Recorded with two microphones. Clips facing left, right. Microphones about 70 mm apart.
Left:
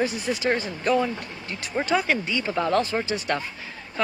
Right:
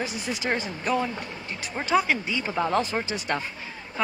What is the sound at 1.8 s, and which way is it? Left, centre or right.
Speech, centre.